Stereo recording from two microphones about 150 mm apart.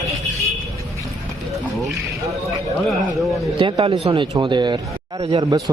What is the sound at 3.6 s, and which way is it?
A man's voice, 35° right (ahead or behind).